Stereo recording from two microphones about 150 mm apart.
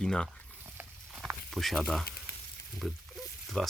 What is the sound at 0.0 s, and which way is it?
Speech, 5° left (ahead or behind).